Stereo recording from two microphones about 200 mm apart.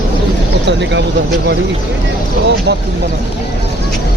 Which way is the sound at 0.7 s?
65° right (ahead or behind).